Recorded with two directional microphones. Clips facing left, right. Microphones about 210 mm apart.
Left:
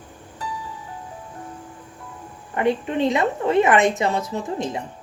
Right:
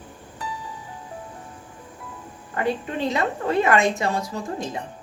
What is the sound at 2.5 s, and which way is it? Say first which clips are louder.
A woman's voice: left 4 dB; 20° left (ahead or behind).